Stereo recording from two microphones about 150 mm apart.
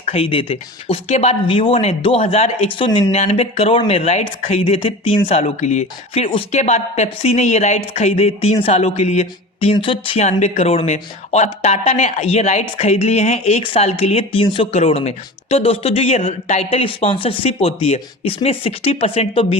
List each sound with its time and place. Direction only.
0.0 s speech: 40° left (ahead or behind)
3.2 s speech: 50° left (ahead or behind)